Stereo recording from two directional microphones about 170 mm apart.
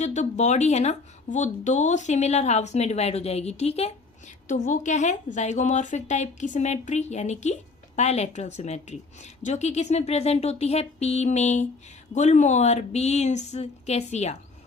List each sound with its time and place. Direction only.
0.0 s speech: 45° left (ahead or behind)
4.4 s a woman's voice: 50° left (ahead or behind)